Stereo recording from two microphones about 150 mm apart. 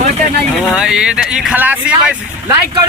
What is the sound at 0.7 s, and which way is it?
Speech, 5° right (ahead or behind).